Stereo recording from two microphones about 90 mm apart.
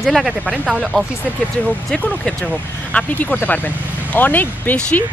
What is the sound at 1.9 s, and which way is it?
Speech, 15° left (ahead or behind).